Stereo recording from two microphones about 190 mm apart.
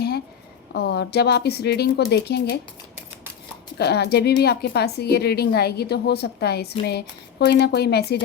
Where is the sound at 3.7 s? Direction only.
60° left (ahead or behind).